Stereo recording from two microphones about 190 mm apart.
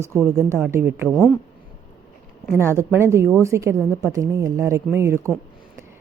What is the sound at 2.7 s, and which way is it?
A woman's voice, 15° right (ahead or behind).